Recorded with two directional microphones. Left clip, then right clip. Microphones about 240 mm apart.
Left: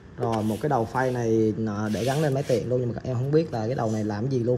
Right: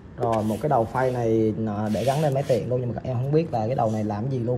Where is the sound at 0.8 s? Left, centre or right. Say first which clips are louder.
Right 2 dB; centre.